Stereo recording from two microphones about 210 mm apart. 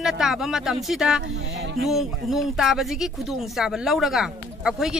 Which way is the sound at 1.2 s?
60° right (ahead or behind).